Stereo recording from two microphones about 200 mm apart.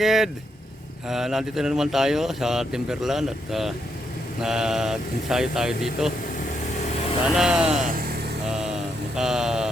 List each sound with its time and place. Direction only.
0.0 s speech: centre (ahead or behind)
7.3 s speech: 5° right (ahead or behind)
7.8 s speech: 40° right (ahead or behind)
8.4 s vehicle: 5° right (ahead or behind)
9.1 s a sound: centre (ahead or behind)